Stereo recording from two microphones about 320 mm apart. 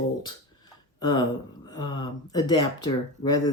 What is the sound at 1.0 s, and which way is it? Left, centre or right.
Speech, centre.